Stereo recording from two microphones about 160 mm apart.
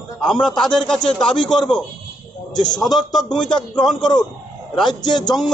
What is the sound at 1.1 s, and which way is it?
Speech, 30° left (ahead or behind).